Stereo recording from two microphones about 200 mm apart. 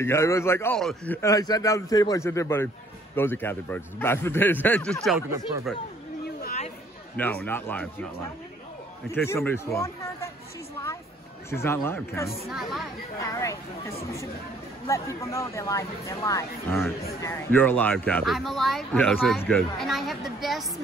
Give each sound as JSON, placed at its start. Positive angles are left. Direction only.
{"t": 0.0, "sound": "speech", "side_deg": 15}
{"t": 7.2, "sound": "speech", "side_deg": 10}
{"t": 9.1, "sound": "speech", "side_deg": 10}
{"t": 11.5, "sound": "speech", "side_deg": 10}
{"t": 12.4, "sound": "speech", "side_deg": 0}
{"t": 13.2, "sound": "speech", "side_deg": 15}